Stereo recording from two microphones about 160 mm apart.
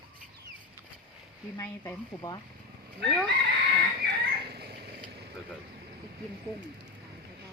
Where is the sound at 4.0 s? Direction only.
75° right (ahead or behind).